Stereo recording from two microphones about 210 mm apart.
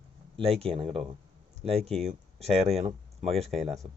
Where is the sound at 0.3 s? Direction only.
30° right (ahead or behind).